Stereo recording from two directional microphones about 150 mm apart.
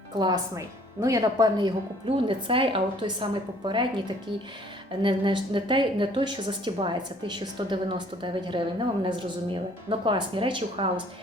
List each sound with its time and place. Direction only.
0.2 s a woman's voice: 25° right (ahead or behind)